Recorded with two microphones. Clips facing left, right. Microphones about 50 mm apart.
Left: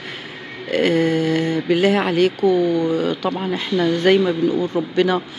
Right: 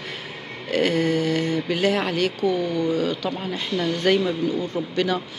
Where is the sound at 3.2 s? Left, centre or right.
Left.